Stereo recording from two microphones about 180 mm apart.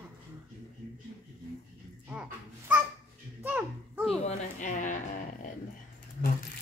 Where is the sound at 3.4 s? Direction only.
10° right (ahead or behind).